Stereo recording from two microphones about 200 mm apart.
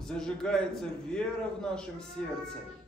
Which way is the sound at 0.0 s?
5° left (ahead or behind).